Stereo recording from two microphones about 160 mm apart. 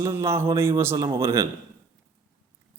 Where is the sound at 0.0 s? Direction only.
20° right (ahead or behind).